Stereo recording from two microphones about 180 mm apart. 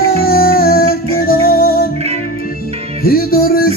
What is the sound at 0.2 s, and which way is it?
Music, 55° left (ahead or behind).